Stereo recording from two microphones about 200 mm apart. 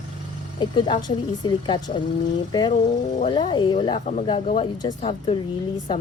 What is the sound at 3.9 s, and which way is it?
Speech, 35° left (ahead or behind).